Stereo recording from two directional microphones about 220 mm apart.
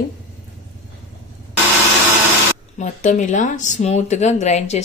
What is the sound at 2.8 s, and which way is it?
Speech, 35° left (ahead or behind).